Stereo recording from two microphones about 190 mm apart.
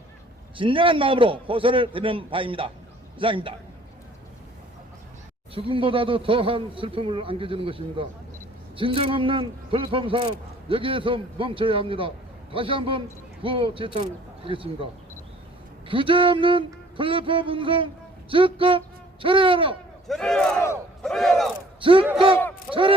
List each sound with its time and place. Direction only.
0.5 s a man's voice: 25° right (ahead or behind)
5.5 s a man's voice: 30° right (ahead or behind)
15.9 s a man's voice: 25° right (ahead or behind)
20.1 s speech: 5° left (ahead or behind)
21.8 s speech: 30° right (ahead or behind)